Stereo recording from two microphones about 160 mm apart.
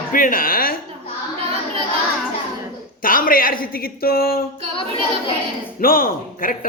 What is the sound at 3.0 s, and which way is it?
Speech, 60° left (ahead or behind).